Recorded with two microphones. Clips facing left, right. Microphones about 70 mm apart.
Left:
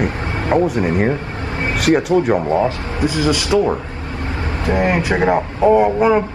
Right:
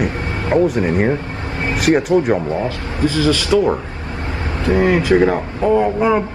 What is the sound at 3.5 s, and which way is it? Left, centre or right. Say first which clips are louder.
Speech: right 1 dB; centre.